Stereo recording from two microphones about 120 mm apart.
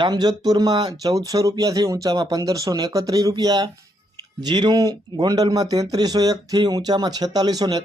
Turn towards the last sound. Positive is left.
turn(degrees=-35)  # may be behind; listen again after turning